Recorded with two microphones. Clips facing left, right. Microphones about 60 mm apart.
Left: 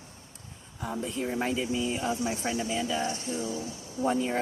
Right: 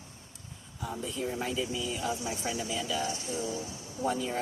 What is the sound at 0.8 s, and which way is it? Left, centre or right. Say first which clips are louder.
Speech: left 3 dB; left.